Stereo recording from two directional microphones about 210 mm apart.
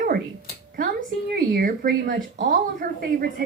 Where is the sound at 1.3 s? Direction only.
45° right (ahead or behind).